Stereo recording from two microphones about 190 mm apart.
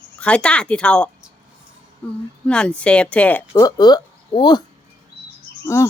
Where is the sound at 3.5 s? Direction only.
20° left (ahead or behind).